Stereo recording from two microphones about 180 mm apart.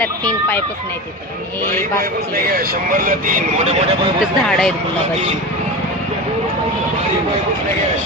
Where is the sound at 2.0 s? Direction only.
55° right (ahead or behind); by 4.1 s 35° right (ahead or behind).